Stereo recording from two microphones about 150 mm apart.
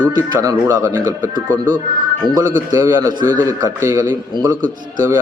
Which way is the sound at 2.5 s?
20° right (ahead or behind).